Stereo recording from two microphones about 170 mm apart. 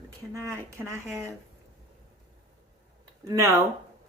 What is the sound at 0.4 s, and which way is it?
Speech, 15° right (ahead or behind).